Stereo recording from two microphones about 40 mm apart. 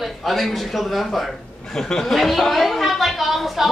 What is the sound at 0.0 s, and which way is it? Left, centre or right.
A man's voice, centre.